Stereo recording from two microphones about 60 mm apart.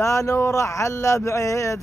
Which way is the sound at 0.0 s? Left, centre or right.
Left.